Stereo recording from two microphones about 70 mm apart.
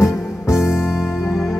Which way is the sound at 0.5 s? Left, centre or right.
Centre.